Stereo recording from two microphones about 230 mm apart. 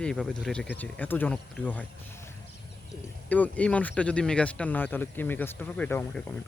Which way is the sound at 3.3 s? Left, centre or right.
Centre.